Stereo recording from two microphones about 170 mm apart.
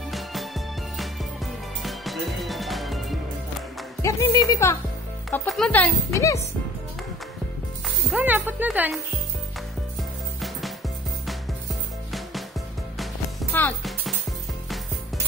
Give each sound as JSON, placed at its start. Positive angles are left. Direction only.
{"t": 0.1, "sound": "music", "side_deg": 0}
{"t": 1.8, "sound": "music", "side_deg": 0}
{"t": 4.0, "sound": "speech", "side_deg": 20}
{"t": 5.3, "sound": "speech", "side_deg": 5}
{"t": 8.1, "sound": "speech", "side_deg": -10}
{"t": 12.9, "sound": "music", "side_deg": 0}
{"t": 13.5, "sound": "music", "side_deg": 10}